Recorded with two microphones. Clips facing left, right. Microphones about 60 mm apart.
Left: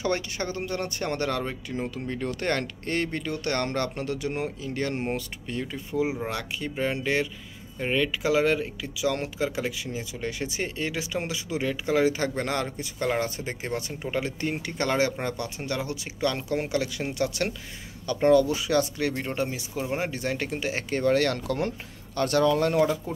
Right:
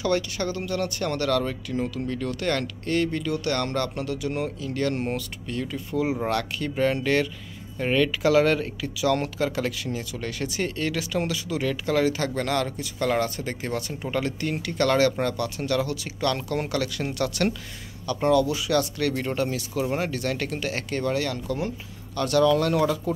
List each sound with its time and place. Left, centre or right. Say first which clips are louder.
0.0 s speech: right 3 dB; left
18.0 s speech: left 1 dB; left
21.0 s speech: left 5 dB; left
22.1 s speech: right 2 dB; left